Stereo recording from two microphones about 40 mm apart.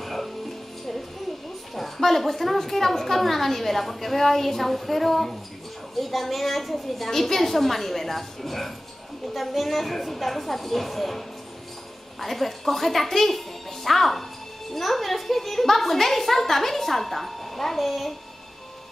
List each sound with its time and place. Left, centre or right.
0.0 s music: centre
1.8 s a woman's voice: centre